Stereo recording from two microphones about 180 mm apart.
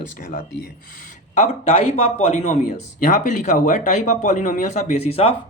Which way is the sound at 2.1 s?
40° left (ahead or behind).